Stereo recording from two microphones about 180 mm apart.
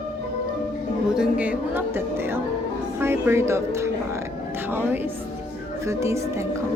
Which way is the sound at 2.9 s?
15° right (ahead or behind).